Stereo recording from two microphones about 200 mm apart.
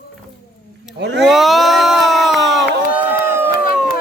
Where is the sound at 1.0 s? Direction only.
60° right (ahead or behind).